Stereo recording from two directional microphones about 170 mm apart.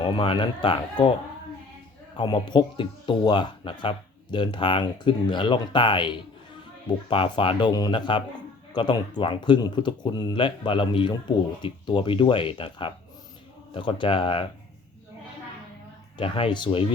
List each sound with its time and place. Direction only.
0.0 s speech: 30° left (ahead or behind)
2.1 s speech: 25° left (ahead or behind)
16.1 s speech: 30° left (ahead or behind)